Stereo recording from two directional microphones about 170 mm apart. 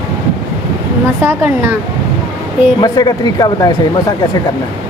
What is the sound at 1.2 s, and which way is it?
Speech, 15° right (ahead or behind).